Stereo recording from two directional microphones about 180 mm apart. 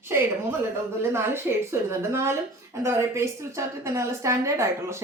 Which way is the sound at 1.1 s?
15° right (ahead or behind).